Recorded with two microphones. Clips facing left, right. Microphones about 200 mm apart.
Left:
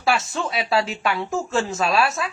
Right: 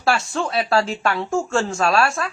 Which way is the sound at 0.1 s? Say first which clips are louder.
Right 2 dB; centre (ahead or behind).